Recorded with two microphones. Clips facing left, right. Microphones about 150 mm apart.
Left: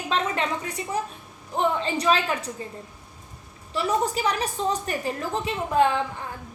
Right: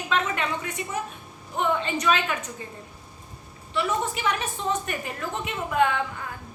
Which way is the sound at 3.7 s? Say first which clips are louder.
Left 2 dB; 35° left (ahead or behind).